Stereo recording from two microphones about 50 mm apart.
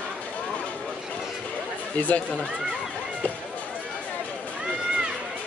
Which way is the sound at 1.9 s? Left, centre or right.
Left.